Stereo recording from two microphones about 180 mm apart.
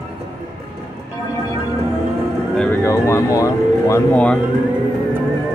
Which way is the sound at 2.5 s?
15° left (ahead or behind).